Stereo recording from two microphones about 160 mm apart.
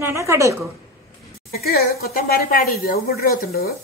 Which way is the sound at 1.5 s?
75° left (ahead or behind).